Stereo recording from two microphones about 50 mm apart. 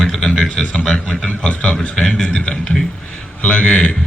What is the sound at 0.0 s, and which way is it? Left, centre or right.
A man's voice, centre.